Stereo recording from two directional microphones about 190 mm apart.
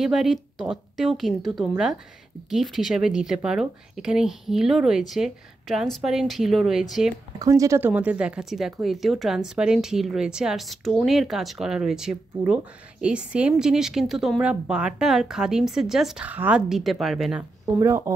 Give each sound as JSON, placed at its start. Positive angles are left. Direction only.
{"t": 0.0, "sound": "speech", "side_deg": 0}
{"t": 7.3, "sound": "speech", "side_deg": -15}
{"t": 17.7, "sound": "speech", "side_deg": -15}